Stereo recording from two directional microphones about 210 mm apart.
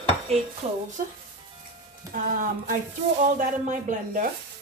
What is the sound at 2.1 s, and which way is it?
Speech, 40° right (ahead or behind).